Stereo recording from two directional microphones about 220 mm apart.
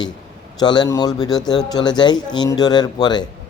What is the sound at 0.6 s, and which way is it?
Speech, 20° left (ahead or behind).